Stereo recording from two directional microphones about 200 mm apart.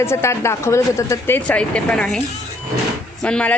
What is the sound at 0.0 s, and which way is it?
A woman's voice, 15° left (ahead or behind).